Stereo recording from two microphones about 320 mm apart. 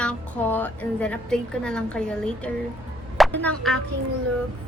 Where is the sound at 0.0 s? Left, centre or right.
Centre.